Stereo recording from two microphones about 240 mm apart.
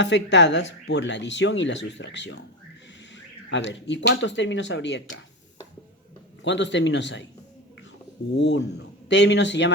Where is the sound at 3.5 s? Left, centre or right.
Left.